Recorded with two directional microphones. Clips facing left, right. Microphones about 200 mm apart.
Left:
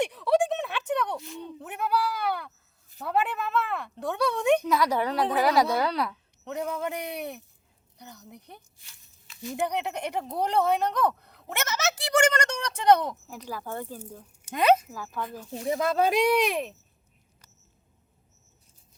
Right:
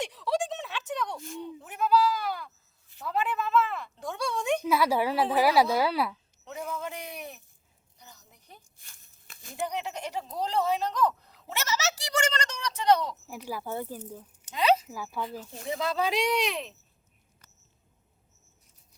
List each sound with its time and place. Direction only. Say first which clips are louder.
0.0 s a sound: left 6 dB; 60° left (ahead or behind)
1.4 s bleat: right 1 dB; 60° left (ahead or behind)
3.0 s speech: left 2 dB; 60° left (ahead or behind)
4.6 s a woman's voice: even; 10° right (ahead or behind)
6.4 s speech: left 5 dB; 65° left (ahead or behind)
7.9 s a sound: left 9 dB; 65° left (ahead or behind)
8.8 s a sound: left 1 dB; 50° right (ahead or behind)
9.6 s speech: left 2 dB; 60° left (ahead or behind)
13.2 s a woman's voice: right 1 dB; 10° right (ahead or behind)
14.5 s speech: left 3 dB; 50° left (ahead or behind)
14.8 s a woman's voice: even; 10° right (ahead or behind)
15.5 s speech: left 5 dB; 50° left (ahead or behind)